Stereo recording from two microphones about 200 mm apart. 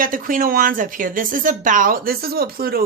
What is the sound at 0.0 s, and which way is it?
Speech, 45° right (ahead or behind).